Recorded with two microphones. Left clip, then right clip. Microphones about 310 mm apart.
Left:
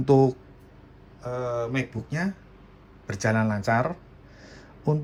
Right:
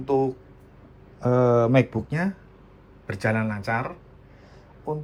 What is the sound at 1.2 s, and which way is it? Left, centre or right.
Speech, centre.